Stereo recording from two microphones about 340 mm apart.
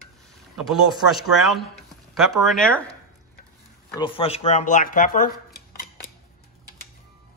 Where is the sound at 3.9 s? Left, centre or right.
Centre.